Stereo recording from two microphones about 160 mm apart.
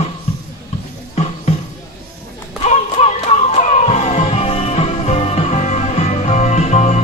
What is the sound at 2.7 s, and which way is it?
Music, 40° left (ahead or behind).